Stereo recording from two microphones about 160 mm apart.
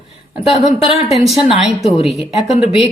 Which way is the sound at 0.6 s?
35° left (ahead or behind).